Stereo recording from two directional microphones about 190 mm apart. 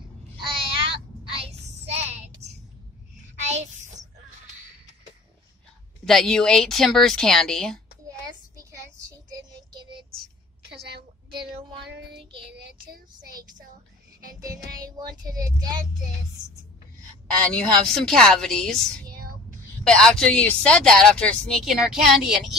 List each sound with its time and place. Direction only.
0.4 s child singing: 25° right (ahead or behind)
3.3 s a sound: 35° right (ahead or behind)
6.0 s speech: centre (ahead or behind)
8.5 s child singing: 15° right (ahead or behind)
10.8 s a woman's voice: 60° right (ahead or behind)
11.8 s child singing: 60° right (ahead or behind)
15.0 s child singing: 20° right (ahead or behind)
17.5 s speech: 5° left (ahead or behind)